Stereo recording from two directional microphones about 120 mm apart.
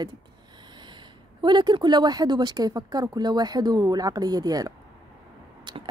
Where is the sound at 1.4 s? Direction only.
40° right (ahead or behind).